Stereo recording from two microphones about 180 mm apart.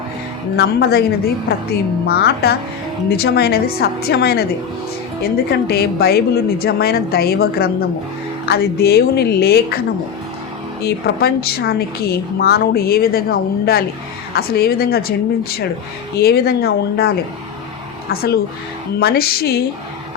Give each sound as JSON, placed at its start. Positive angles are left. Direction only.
{"t": 0.5, "sound": "a woman's voice", "side_deg": 65}
{"t": 2.0, "sound": "a woman's voice", "side_deg": 60}
{"t": 10.8, "sound": "a woman's voice", "side_deg": 60}
{"t": 16.1, "sound": "a woman's voice", "side_deg": 65}
{"t": 18.1, "sound": "a woman's voice", "side_deg": 60}